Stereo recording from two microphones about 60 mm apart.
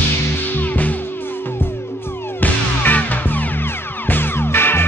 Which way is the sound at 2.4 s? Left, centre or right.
Left.